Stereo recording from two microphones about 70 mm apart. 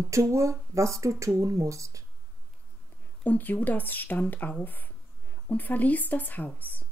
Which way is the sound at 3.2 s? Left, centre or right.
Left.